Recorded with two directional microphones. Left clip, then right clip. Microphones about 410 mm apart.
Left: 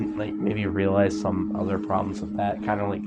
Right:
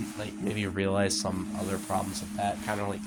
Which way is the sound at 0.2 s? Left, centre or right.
Right.